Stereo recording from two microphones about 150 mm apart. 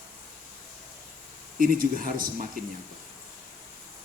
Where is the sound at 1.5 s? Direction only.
70° right (ahead or behind).